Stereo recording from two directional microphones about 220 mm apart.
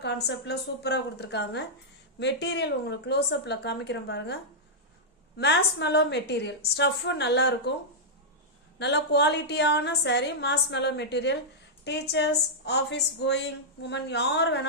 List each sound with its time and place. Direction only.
0.3 s a woman's voice: 50° left (ahead or behind)
5.4 s a woman's voice: 50° left (ahead or behind)
8.8 s a woman's voice: 50° left (ahead or behind)